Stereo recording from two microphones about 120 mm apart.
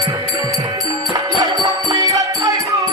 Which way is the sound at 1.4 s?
30° right (ahead or behind).